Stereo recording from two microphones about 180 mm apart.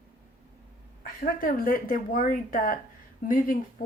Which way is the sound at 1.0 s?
50° left (ahead or behind).